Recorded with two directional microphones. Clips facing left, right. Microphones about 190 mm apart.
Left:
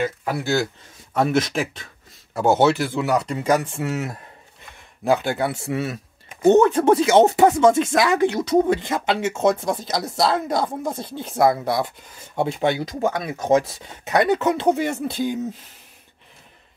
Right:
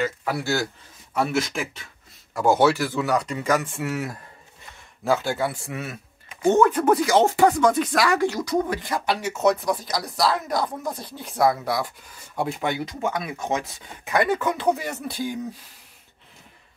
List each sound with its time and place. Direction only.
0.0 s speech: 20° left (ahead or behind)
2.3 s speech: 25° left (ahead or behind)
12.6 s speech: 35° left (ahead or behind)
14.3 s speech: 25° left (ahead or behind)